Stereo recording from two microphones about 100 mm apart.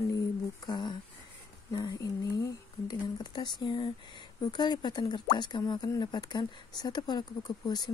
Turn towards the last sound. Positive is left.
turn(degrees=40)  # may be behind; listen again after turning